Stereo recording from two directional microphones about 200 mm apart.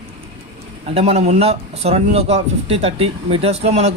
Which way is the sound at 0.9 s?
30° right (ahead or behind).